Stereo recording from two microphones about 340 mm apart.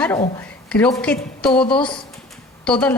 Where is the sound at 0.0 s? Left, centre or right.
Centre.